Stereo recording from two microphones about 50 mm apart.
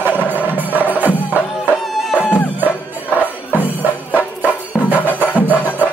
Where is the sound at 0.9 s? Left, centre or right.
Right.